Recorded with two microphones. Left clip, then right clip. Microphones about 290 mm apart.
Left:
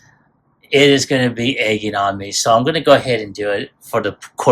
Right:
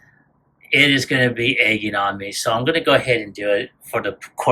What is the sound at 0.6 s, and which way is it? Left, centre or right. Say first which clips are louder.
Speech: left 3 dB; centre.